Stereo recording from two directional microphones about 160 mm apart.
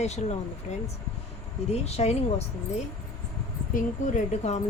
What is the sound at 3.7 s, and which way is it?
Speech, 50° left (ahead or behind).